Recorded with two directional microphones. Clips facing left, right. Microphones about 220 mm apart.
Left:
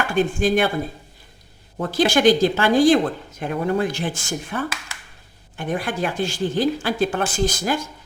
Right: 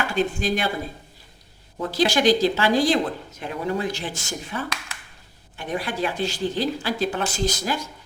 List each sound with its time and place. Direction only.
0.1 s a woman's voice: 50° left (ahead or behind)
1.8 s a woman's voice: 50° left (ahead or behind)